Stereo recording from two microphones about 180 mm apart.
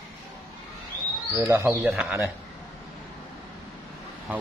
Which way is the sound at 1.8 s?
5° right (ahead or behind).